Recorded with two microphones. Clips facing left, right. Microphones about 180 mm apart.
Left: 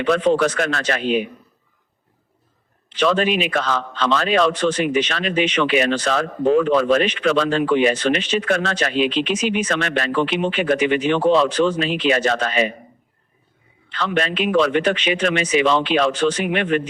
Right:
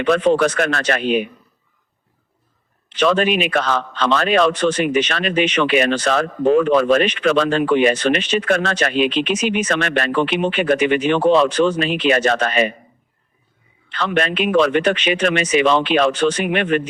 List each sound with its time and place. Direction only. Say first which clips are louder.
0.0 s a man's voice: right 2 dB; 60° right (ahead or behind)
3.0 s a man's voice: right 2 dB; 60° right (ahead or behind)
13.9 s a man's voice: right 2 dB; 60° right (ahead or behind)